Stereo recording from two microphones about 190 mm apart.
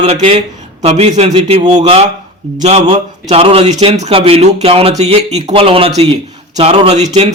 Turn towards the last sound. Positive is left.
turn(degrees=-30)  # may be behind; listen again after turning